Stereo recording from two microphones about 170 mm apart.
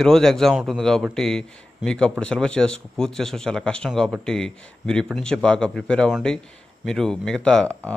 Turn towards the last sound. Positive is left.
turn(degrees=5)  # may be behind; listen again after turning